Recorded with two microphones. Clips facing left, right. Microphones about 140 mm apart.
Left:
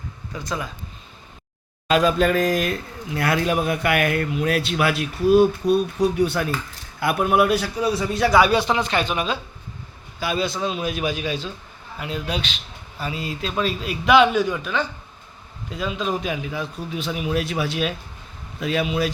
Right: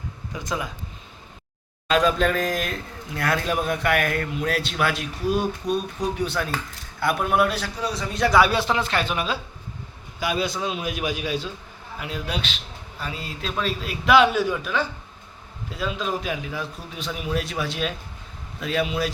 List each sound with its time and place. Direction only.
0.3 s a man's voice: 15° right (ahead or behind)
1.9 s a man's voice: 5° left (ahead or behind)